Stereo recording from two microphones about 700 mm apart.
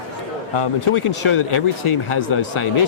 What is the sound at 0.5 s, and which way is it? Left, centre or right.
Speech, left.